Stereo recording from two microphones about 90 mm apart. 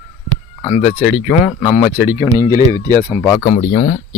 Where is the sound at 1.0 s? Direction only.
15° right (ahead or behind).